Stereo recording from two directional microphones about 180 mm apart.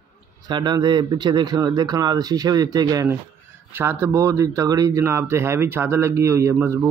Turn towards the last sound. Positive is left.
turn(degrees=-15)  # may be behind; listen again after turning